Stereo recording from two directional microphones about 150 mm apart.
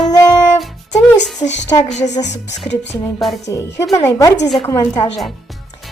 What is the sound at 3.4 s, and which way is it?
Child singing, 20° left (ahead or behind).